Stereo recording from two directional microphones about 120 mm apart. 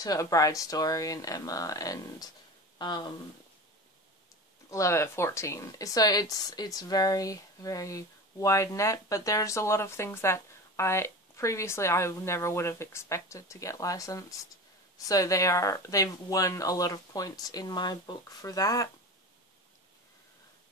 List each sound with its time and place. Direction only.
0.0 s speech: 30° left (ahead or behind)
4.6 s speech: 25° left (ahead or behind)